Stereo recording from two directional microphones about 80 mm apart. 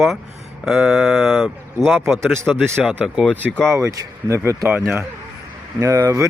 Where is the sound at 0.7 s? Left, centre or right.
Centre.